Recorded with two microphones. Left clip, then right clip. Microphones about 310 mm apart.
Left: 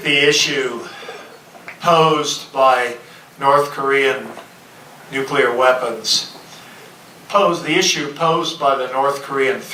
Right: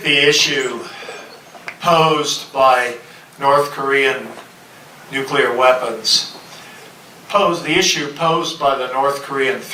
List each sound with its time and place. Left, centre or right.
0.0 s speech: centre
1.8 s a man's voice: centre
7.3 s a man's voice: centre
8.4 s speech: left
8.6 s speech: centre